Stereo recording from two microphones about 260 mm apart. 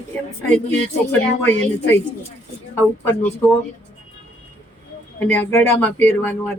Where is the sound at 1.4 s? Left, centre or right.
Centre.